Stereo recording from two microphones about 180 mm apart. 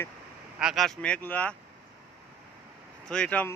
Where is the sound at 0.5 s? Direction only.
Centre (ahead or behind).